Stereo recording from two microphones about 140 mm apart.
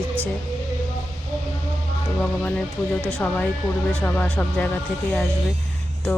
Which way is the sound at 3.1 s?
10° left (ahead or behind).